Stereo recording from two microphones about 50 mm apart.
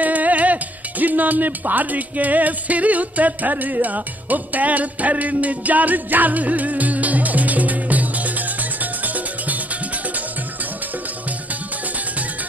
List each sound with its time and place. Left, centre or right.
0.0 s music: right